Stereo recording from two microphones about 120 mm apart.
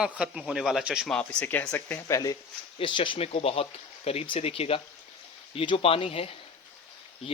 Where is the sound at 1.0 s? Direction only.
5° left (ahead or behind).